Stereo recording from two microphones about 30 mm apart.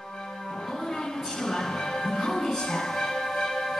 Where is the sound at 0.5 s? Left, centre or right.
Centre.